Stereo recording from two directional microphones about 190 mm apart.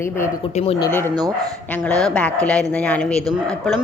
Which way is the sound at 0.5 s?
30° left (ahead or behind).